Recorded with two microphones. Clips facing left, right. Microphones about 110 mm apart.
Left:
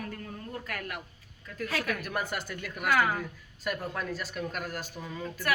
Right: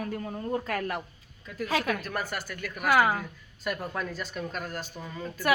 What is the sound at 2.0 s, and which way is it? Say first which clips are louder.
Speech: even; 15° left (ahead or behind).